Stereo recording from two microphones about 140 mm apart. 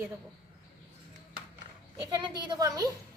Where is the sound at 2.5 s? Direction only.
25° right (ahead or behind).